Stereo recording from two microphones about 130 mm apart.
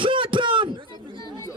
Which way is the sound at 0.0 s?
40° right (ahead or behind).